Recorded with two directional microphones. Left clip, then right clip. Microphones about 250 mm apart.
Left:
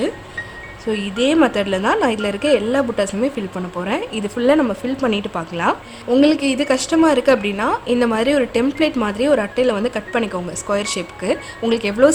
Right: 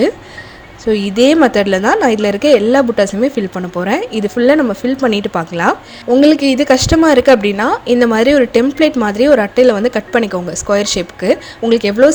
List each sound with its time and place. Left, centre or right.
0.9 s a woman's voice: centre